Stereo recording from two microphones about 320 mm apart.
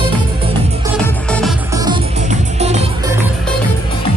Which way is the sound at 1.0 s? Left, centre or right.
Centre.